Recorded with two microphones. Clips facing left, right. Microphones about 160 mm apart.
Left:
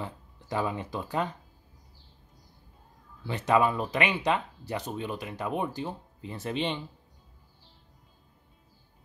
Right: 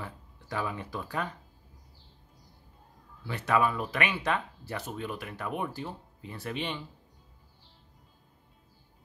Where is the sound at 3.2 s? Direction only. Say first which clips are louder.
Left 3 dB; 20° left (ahead or behind).